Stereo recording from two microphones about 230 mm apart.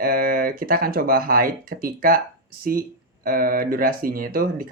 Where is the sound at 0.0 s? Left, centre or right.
Right.